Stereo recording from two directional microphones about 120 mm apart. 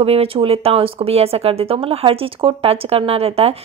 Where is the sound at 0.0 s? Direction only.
55° right (ahead or behind).